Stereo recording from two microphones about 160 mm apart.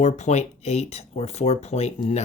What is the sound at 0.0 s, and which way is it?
Speech, 45° left (ahead or behind).